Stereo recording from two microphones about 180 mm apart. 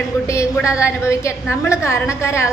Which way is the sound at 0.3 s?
15° left (ahead or behind).